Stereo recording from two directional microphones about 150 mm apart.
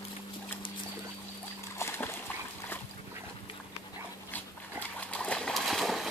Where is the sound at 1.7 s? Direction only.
15° left (ahead or behind).